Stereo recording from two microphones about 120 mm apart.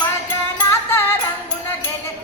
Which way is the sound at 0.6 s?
20° left (ahead or behind).